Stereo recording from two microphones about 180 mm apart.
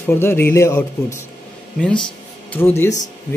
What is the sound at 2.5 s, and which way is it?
Speech, 10° left (ahead or behind).